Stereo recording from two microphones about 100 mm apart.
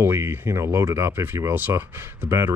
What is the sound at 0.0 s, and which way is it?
Speech, 25° right (ahead or behind).